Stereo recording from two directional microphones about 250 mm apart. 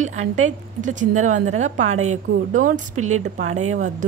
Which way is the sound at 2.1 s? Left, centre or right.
Right.